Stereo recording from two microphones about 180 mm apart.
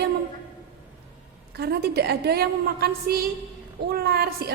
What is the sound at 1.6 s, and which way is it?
A woman's voice, 65° right (ahead or behind).